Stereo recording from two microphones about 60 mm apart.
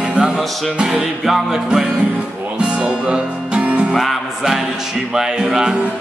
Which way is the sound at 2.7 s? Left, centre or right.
Centre.